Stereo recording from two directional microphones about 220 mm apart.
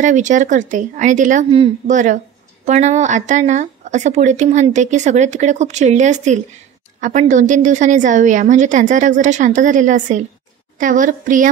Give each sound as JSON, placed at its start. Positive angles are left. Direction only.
{"t": 0.0, "sound": "speech", "side_deg": -35}